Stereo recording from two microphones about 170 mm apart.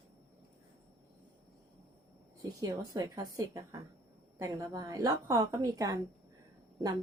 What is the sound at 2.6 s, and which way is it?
A woman's voice, 20° right (ahead or behind).